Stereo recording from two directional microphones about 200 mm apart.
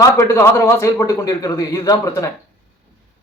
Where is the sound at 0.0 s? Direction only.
15° left (ahead or behind).